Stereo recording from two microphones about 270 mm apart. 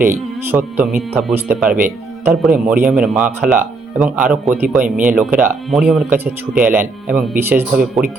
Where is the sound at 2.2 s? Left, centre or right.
Centre.